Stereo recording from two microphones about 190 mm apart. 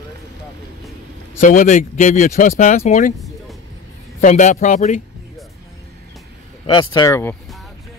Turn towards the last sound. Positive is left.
turn(degrees=15)  # may be behind; listen again after turning